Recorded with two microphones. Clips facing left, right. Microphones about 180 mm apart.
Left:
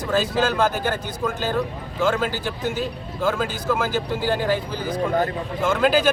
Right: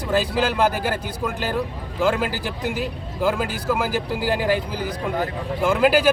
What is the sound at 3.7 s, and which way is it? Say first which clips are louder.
A man's voice: even; 10° right (ahead or behind).